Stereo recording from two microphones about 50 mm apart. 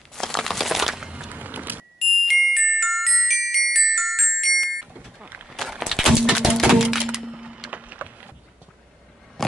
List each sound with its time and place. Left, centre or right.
0.1 s crumpling: centre
1.3 s a sound: right
2.0 s glockenspiel: centre
5.2 s a sound: right
5.5 s walk: centre
6.5 s music: centre
7.7 s wood: right